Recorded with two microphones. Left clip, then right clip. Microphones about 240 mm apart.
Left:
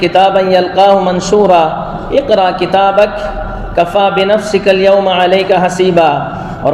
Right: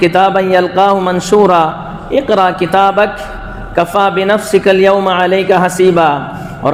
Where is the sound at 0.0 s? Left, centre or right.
Right.